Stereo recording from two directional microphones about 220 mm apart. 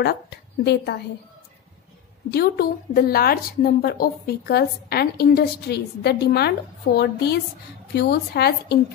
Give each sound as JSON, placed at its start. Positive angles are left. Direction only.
{"t": 0.0, "sound": "a woman's voice", "side_deg": 50}
{"t": 2.3, "sound": "a woman's voice", "side_deg": 45}